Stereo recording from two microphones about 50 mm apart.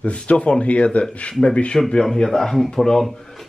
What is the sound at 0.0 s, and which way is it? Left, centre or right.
Speech, left.